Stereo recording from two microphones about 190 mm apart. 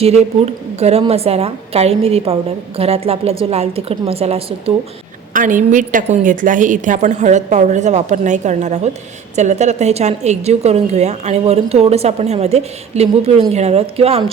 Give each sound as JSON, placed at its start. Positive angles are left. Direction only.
{"t": 0.0, "sound": "a woman's voice", "side_deg": -35}
{"t": 5.3, "sound": "a woman's voice", "side_deg": -45}